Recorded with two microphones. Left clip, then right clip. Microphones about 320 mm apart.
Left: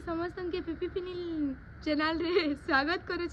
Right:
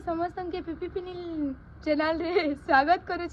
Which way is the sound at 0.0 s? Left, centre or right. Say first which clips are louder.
Right 5 dB; centre.